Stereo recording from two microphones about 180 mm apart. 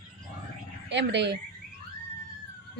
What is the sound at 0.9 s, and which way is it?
Speech, 75° right (ahead or behind).